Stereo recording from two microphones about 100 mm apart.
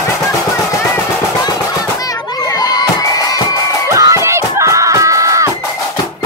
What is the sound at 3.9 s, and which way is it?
Music, 30° right (ahead or behind).